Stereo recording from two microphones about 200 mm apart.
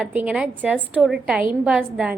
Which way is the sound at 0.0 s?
5° right (ahead or behind).